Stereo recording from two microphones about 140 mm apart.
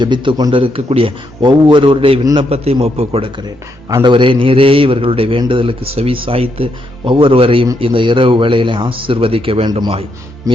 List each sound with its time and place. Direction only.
0.0 s speech: 35° right (ahead or behind)
3.8 s speech: 25° right (ahead or behind)
4.1 s speech: 35° right (ahead or behind)
10.5 s speech: 25° right (ahead or behind)